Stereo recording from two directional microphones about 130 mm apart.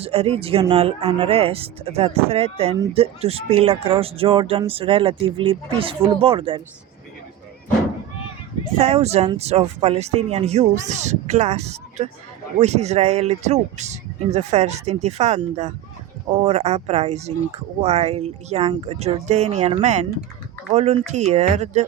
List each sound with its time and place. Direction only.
0.0 s speech: 50° right (ahead or behind)
8.8 s speech: 50° right (ahead or behind)